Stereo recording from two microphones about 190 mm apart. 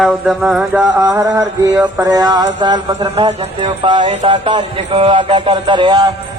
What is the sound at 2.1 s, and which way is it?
A man's voice, 20° right (ahead or behind).